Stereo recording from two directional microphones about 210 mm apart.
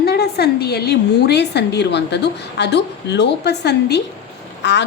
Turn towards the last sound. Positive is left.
turn(degrees=55)  # may be behind; listen again after turning